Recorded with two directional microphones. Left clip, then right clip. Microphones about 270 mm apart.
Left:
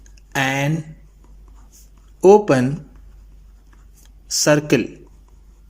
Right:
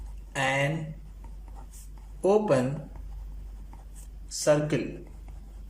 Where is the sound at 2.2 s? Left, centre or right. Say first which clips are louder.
Left 11 dB; left.